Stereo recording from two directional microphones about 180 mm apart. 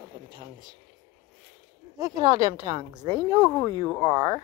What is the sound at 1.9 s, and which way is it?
Speech, 20° right (ahead or behind).